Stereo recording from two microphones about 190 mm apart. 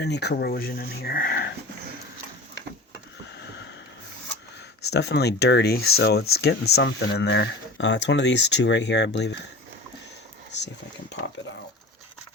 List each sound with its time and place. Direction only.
0.0 s speech: 60° left (ahead or behind)
4.9 s speech: 60° left (ahead or behind)